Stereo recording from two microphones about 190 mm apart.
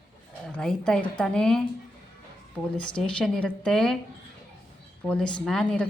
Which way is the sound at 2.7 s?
5° left (ahead or behind).